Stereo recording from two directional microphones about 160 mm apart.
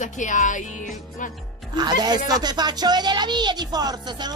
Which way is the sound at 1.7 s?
25° right (ahead or behind).